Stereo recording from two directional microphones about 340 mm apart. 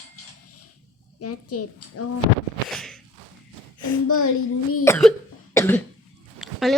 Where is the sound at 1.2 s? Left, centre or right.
Left.